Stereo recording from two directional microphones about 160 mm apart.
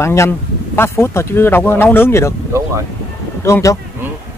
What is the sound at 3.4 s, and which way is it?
Speech, 15° left (ahead or behind).